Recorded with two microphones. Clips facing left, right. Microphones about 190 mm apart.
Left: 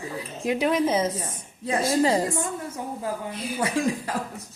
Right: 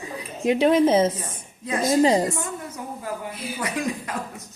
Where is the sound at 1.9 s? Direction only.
20° right (ahead or behind).